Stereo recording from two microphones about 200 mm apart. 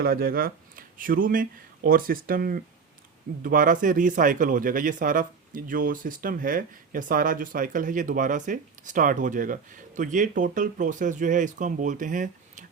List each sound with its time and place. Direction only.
0.0 s speech: 50° right (ahead or behind)